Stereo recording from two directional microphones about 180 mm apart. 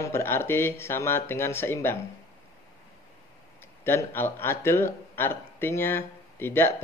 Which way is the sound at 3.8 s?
15° left (ahead or behind).